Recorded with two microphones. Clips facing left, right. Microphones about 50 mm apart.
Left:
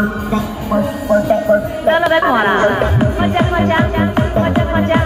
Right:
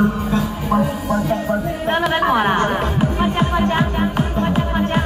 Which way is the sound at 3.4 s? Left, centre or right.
Left.